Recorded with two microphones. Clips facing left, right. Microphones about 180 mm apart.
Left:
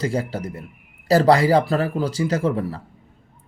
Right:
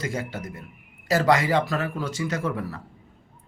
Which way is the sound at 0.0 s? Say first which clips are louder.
Left 6 dB; 35° left (ahead or behind).